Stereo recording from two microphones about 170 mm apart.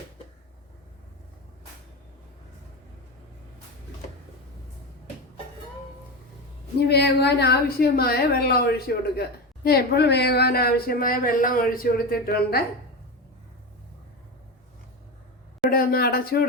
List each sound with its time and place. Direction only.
6.7 s a woman's voice: 70° left (ahead or behind)
15.7 s a woman's voice: 60° left (ahead or behind)